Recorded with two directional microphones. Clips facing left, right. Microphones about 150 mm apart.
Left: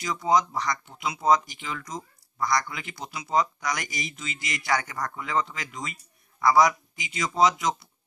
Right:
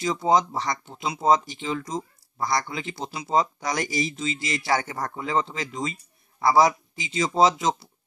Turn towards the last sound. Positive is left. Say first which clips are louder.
# right 2 dB
turn(degrees=-25)  # may be behind; listen again after turning